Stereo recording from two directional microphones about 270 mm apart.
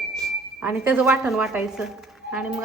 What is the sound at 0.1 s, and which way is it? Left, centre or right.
A woman's voice, centre.